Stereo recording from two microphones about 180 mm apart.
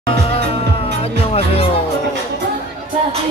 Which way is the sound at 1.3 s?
35° left (ahead or behind).